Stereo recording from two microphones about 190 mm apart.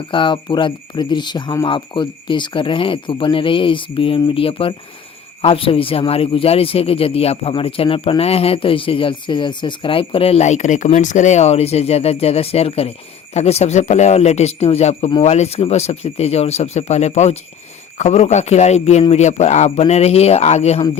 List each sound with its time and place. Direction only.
0.1 s a man's voice: 25° left (ahead or behind)